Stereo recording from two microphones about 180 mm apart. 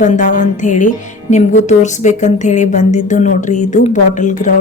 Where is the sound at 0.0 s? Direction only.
45° left (ahead or behind).